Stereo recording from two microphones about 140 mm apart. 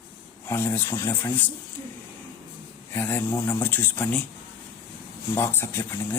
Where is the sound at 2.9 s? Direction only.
15° left (ahead or behind).